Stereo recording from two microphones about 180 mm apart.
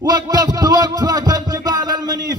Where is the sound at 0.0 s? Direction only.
20° right (ahead or behind).